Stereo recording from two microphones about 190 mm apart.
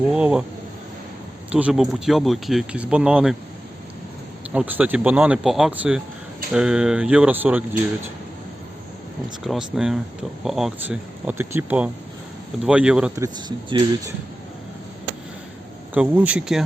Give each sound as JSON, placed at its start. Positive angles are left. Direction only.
{"t": 0.1, "sound": "speech", "side_deg": -5}
{"t": 1.5, "sound": "speech", "side_deg": -5}
{"t": 4.5, "sound": "speech", "side_deg": -10}
{"t": 9.4, "sound": "speech", "side_deg": 0}
{"t": 13.1, "sound": "speech", "side_deg": -20}
{"t": 16.0, "sound": "speech", "side_deg": -5}